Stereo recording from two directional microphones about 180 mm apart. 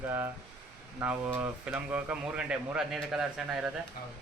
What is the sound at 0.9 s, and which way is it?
Speech, 10° right (ahead or behind).